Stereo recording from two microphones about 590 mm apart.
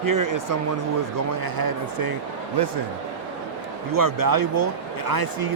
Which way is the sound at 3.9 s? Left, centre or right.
Right.